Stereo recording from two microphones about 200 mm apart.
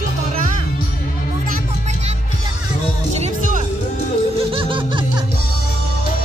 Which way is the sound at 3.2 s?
40° right (ahead or behind).